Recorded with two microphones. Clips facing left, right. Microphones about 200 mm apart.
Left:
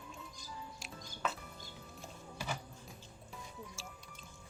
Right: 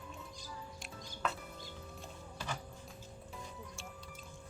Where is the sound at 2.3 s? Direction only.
10° left (ahead or behind).